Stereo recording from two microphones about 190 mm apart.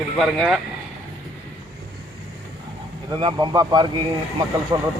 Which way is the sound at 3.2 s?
20° right (ahead or behind).